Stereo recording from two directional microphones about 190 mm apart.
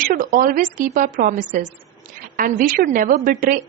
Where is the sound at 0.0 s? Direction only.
50° right (ahead or behind).